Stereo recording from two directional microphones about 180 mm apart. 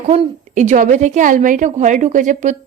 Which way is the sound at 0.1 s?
40° right (ahead or behind).